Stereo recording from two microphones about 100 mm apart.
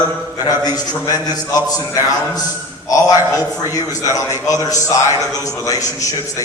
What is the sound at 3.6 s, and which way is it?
A man's voice, 30° left (ahead or behind).